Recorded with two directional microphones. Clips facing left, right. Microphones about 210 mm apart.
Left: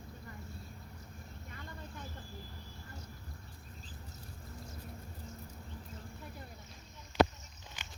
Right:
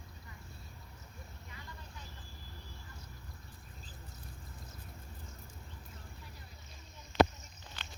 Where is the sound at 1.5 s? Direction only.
55° left (ahead or behind).